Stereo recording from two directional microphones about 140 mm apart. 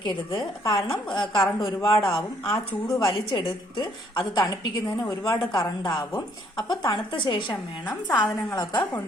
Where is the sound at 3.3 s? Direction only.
35° left (ahead or behind).